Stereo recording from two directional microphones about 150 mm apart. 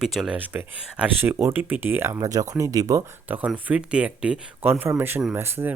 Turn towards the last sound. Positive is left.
turn(degrees=-15)  # may be behind; listen again after turning